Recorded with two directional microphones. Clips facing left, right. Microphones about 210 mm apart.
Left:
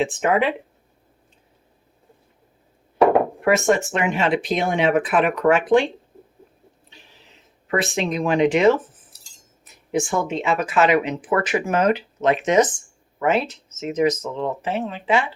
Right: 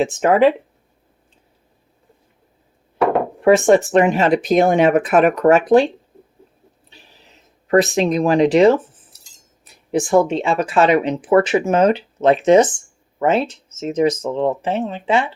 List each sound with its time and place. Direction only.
0.0 s speech: 40° right (ahead or behind)
3.4 s speech: 30° right (ahead or behind)
7.7 s speech: 40° right (ahead or behind)
9.9 s speech: 35° right (ahead or behind)